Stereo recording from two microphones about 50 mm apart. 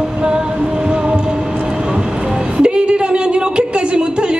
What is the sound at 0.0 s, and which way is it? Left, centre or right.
Music, centre.